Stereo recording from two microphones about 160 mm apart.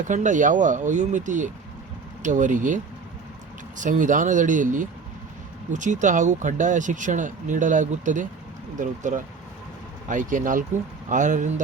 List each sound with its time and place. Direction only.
0.1 s speech: 50° right (ahead or behind)